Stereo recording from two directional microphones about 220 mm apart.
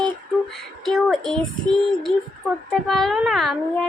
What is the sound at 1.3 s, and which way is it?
A woman's voice, centre (ahead or behind).